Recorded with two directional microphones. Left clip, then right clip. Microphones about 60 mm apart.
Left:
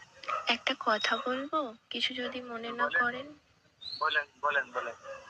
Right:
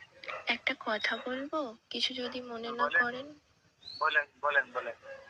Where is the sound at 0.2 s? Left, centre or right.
Left.